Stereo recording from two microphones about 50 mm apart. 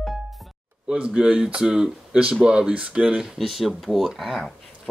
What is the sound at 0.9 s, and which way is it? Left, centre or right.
Speech, centre.